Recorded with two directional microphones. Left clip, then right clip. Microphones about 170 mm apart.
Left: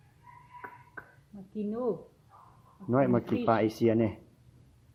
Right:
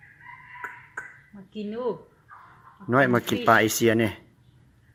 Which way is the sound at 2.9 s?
25° right (ahead or behind).